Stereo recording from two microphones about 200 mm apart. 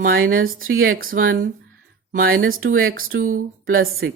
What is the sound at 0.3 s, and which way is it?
Speech, 45° right (ahead or behind).